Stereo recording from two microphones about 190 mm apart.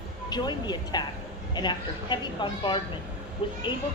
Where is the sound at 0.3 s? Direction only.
20° left (ahead or behind).